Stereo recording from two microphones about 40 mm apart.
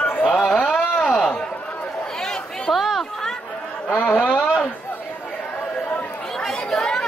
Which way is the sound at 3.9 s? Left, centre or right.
Left.